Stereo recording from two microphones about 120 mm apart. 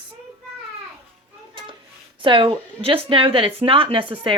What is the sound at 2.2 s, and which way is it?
Speech, 45° right (ahead or behind).